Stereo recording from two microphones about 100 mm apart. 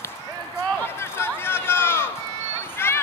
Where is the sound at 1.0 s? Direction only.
25° left (ahead or behind).